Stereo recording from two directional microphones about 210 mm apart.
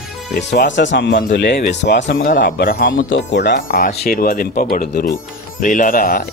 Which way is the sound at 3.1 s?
55° left (ahead or behind).